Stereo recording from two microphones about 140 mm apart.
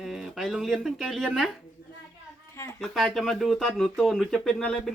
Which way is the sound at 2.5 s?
20° left (ahead or behind).